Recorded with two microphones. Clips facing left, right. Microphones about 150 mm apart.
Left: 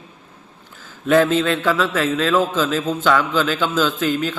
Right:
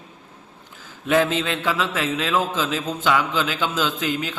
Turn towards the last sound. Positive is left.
turn(degrees=-15)  # may be behind; listen again after turning